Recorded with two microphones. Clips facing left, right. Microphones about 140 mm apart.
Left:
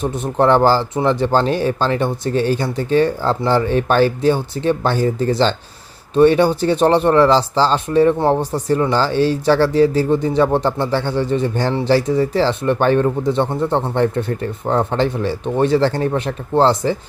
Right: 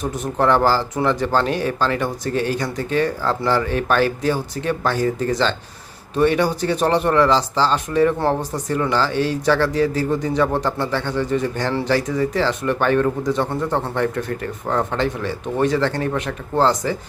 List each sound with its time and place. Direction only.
0.0 s speech: 30° left (ahead or behind)